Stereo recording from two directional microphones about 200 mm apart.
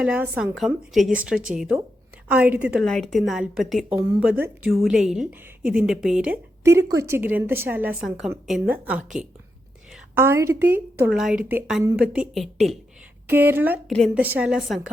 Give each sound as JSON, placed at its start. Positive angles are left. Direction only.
{"t": 0.0, "sound": "a woman's voice", "side_deg": -5}
{"t": 13.3, "sound": "a woman's voice", "side_deg": -10}